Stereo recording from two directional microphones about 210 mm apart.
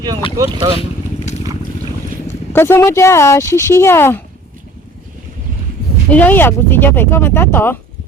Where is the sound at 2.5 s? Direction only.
10° left (ahead or behind).